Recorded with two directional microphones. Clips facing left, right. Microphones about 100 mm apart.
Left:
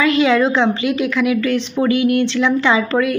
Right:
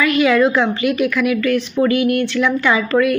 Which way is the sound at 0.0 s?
25° left (ahead or behind).